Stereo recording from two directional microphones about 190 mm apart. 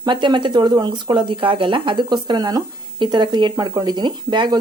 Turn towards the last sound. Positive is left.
turn(degrees=-25)  # may be behind; listen again after turning